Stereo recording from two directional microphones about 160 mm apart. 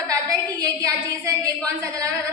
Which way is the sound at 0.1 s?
20° right (ahead or behind).